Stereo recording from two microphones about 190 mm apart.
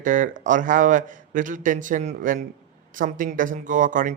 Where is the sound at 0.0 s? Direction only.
45° right (ahead or behind).